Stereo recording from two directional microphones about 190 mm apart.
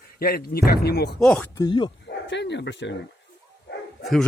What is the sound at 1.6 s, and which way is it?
Speech, 25° left (ahead or behind).